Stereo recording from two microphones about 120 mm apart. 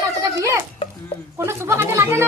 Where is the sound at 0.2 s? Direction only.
25° right (ahead or behind).